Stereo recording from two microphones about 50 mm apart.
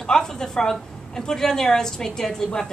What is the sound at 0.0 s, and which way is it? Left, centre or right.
A woman's voice, centre.